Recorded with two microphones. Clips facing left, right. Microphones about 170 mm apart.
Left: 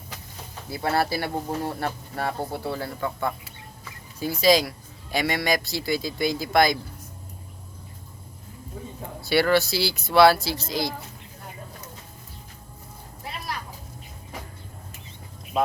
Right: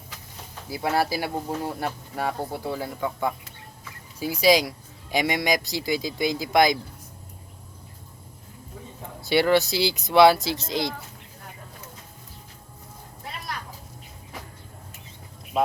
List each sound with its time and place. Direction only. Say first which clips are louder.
0.7 s speech: even; 10° right (ahead or behind)
9.2 s speech: right 1 dB; 20° right (ahead or behind)